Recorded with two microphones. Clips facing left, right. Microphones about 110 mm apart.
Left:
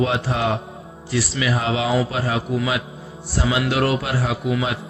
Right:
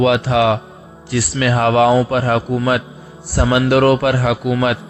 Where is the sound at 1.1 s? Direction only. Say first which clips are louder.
Right 4 dB; 60° right (ahead or behind).